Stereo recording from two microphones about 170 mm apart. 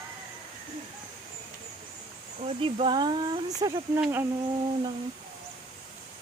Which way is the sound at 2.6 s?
30° right (ahead or behind).